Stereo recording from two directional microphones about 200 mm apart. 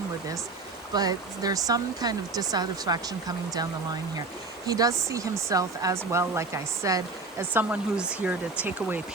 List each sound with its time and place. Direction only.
0.9 s speech: 20° right (ahead or behind)